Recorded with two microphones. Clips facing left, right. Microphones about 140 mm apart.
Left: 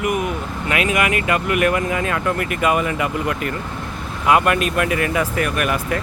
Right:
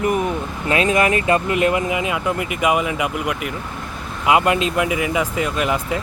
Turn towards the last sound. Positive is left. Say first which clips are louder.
# even
turn(degrees=-20)  # may be behind; listen again after turning